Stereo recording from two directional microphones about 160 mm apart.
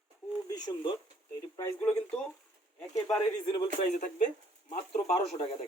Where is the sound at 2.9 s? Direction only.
20° left (ahead or behind).